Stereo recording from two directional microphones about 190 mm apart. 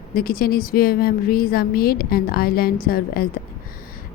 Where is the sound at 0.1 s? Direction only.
50° left (ahead or behind).